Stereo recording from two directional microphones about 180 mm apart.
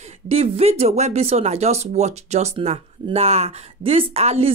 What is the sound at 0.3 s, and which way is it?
Speech, 35° right (ahead or behind).